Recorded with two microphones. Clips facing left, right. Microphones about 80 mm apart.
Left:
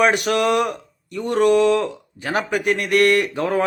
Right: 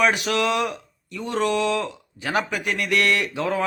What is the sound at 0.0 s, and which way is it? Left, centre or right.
Speech, left.